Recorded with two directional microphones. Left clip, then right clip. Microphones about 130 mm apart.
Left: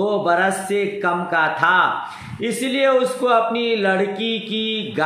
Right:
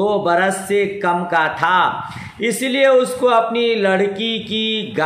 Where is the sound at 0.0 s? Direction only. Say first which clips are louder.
Right 2 dB; 25° right (ahead or behind).